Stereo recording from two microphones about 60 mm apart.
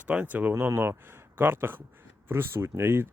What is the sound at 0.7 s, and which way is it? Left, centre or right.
Speech, right.